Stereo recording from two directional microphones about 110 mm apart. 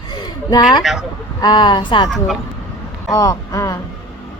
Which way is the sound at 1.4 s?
45° left (ahead or behind).